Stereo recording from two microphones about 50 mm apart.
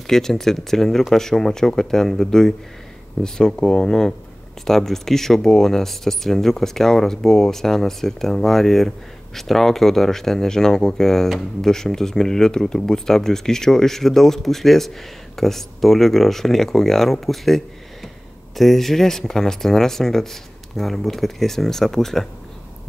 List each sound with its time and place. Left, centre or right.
0.0 s speech: centre